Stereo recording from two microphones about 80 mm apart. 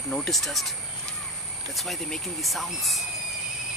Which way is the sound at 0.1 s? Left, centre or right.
Centre.